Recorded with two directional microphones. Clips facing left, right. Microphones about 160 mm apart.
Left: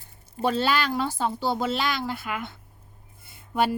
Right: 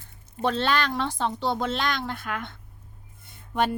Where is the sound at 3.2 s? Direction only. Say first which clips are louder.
Left 1 dB; 5° left (ahead or behind).